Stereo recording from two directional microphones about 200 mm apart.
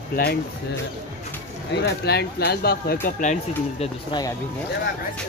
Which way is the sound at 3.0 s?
35° left (ahead or behind).